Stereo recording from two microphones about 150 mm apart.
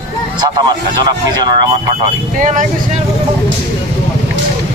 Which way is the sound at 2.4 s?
60° right (ahead or behind).